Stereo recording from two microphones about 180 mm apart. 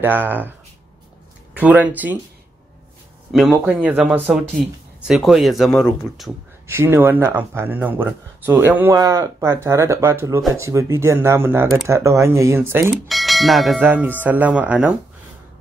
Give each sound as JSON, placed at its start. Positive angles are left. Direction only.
{"t": 0.0, "sound": "speech", "side_deg": -10}
{"t": 3.3, "sound": "speech", "side_deg": 0}
{"t": 6.7, "sound": "speech", "side_deg": -10}
{"t": 13.1, "sound": "speech", "side_deg": 0}